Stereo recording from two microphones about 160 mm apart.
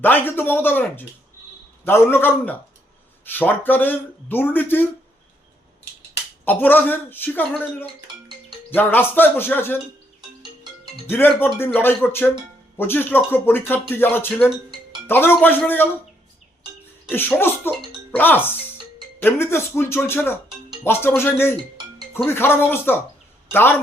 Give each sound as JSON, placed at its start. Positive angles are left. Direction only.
{"t": 0.0, "sound": "speech", "side_deg": 10}
{"t": 6.4, "sound": "speech", "side_deg": 10}
{"t": 10.2, "sound": "music", "side_deg": -25}
{"t": 11.1, "sound": "speech", "side_deg": 15}
{"t": 17.1, "sound": "speech", "side_deg": 15}